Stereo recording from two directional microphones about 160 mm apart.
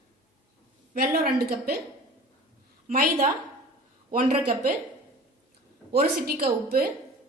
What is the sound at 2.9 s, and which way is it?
A woman's voice, 55° right (ahead or behind).